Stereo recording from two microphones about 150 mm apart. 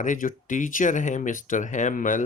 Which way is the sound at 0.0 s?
60° left (ahead or behind).